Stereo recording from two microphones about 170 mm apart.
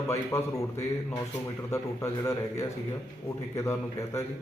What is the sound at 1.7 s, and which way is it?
A man's voice, 20° left (ahead or behind).